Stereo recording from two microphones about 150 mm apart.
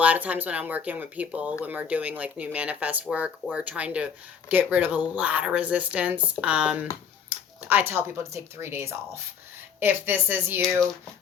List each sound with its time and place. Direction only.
0.0 s speech: 10° right (ahead or behind)
10.6 s speech: centre (ahead or behind)